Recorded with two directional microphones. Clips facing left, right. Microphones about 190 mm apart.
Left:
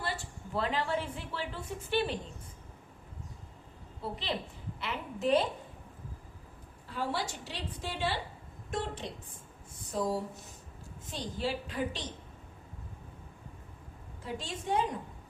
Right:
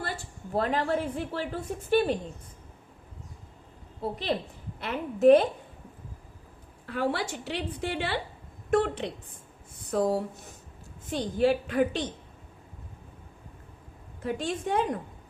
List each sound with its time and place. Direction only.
0.0 s a woman's voice: 50° right (ahead or behind)
4.0 s a woman's voice: 50° right (ahead or behind)
6.8 s a woman's voice: 65° right (ahead or behind)
14.2 s a woman's voice: 55° right (ahead or behind)